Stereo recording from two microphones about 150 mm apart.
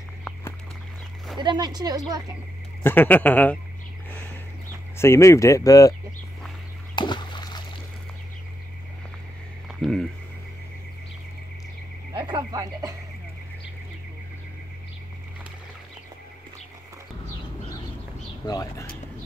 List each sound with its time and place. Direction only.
1.4 s a woman's voice: 30° right (ahead or behind)
2.8 s speech: 15° left (ahead or behind)
4.9 s speech: 15° left (ahead or behind)
7.0 s a sound: 30° left (ahead or behind)
9.7 s a sound: centre (ahead or behind)
12.1 s speech: 30° right (ahead or behind)
18.5 s speech: 25° left (ahead or behind)